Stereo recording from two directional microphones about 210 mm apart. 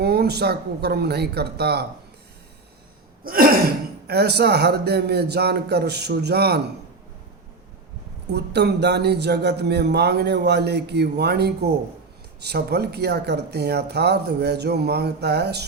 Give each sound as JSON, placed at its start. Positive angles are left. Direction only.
{"t": 0.0, "sound": "a man's voice", "side_deg": -50}
{"t": 3.2, "sound": "gasp", "side_deg": -45}
{"t": 4.0, "sound": "a man's voice", "side_deg": -50}
{"t": 8.3, "sound": "a man's voice", "side_deg": -50}